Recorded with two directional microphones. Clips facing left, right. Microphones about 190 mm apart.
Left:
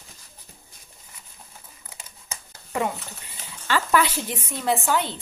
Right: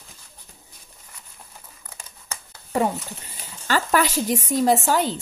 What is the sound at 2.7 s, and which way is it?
Speech, 40° right (ahead or behind).